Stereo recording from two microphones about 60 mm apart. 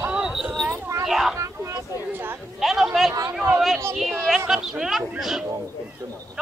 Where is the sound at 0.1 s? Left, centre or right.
Centre.